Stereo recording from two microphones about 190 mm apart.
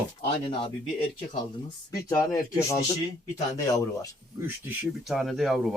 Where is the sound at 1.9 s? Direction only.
20° left (ahead or behind).